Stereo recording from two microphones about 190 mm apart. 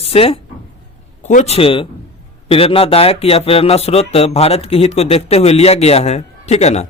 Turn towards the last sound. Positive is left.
turn(degrees=35)  # may be behind; listen again after turning